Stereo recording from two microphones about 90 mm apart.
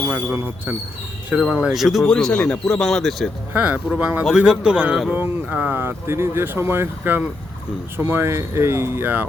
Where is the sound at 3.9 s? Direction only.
15° right (ahead or behind).